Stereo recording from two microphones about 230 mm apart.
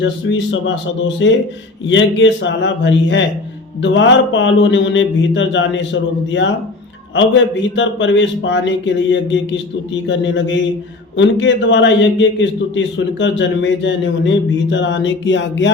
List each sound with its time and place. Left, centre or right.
0.0 s a man's voice: left